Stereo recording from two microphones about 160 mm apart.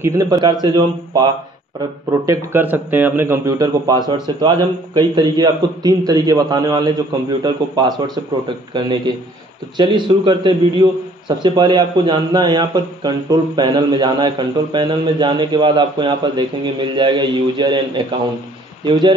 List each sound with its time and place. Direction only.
0.0 s a man's voice: 20° right (ahead or behind)
2.2 s a man's voice: 10° right (ahead or behind); by 19.1 s 30° right (ahead or behind)